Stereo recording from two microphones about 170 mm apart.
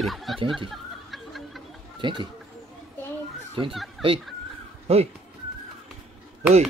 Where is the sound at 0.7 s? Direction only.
Centre (ahead or behind).